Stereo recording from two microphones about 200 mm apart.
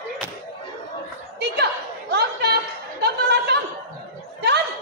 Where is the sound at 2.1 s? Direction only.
55° right (ahead or behind).